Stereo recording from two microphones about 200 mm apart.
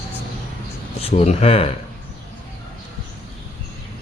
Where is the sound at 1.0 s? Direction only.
30° left (ahead or behind).